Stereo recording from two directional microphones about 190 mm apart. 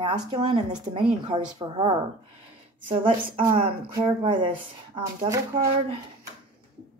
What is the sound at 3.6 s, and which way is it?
Speech, 30° right (ahead or behind).